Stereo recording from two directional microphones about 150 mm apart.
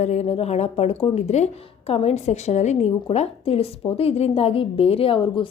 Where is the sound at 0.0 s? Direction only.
50° left (ahead or behind).